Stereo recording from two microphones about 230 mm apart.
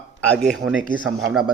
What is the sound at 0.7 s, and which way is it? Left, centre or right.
Speech, right.